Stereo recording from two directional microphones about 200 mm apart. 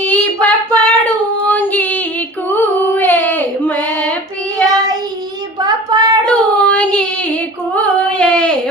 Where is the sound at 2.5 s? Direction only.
10° left (ahead or behind).